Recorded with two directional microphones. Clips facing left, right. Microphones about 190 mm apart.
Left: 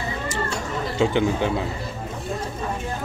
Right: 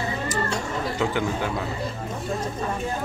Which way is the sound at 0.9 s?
25° left (ahead or behind).